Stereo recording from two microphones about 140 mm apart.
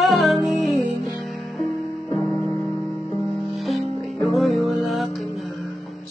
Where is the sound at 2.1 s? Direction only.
20° left (ahead or behind).